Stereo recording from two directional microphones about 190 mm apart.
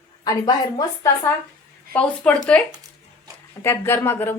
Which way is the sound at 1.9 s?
10° left (ahead or behind).